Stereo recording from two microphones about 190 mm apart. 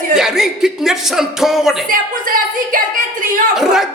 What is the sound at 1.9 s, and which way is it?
Speech, 45° right (ahead or behind).